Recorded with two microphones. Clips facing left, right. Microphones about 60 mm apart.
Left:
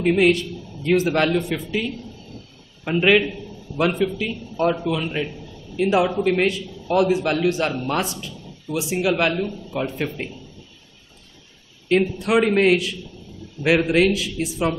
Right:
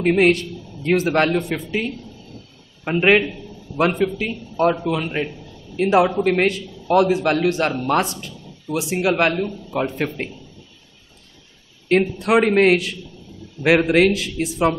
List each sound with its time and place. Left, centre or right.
0.0 s a man's voice: right
3.0 s a man's voice: right
4.2 s a man's voice: right
12.2 s a man's voice: right